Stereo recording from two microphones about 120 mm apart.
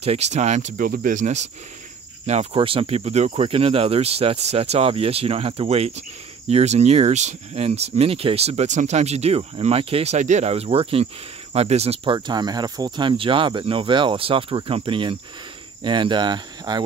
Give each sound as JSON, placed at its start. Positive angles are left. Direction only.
{"t": 0.0, "sound": "speech", "side_deg": -65}
{"t": 2.5, "sound": "speech", "side_deg": -50}
{"t": 10.1, "sound": "speech", "side_deg": -80}